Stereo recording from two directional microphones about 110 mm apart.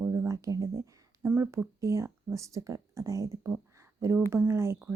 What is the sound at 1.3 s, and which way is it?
Speech, 15° right (ahead or behind).